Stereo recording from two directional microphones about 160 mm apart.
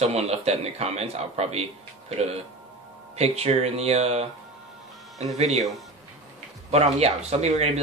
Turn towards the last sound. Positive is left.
turn(degrees=-45)  # may be behind; listen again after turning